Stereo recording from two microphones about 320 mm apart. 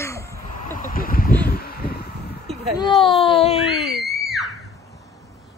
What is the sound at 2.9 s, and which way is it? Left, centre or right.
Speech, centre.